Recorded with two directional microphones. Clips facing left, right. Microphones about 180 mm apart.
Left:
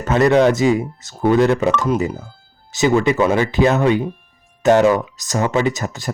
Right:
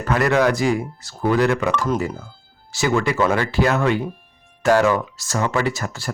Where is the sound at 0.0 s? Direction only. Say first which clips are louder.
Left 5 dB; 20° left (ahead or behind).